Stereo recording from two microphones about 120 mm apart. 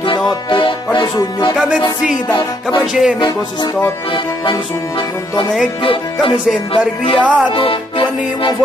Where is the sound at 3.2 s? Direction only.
40° left (ahead or behind).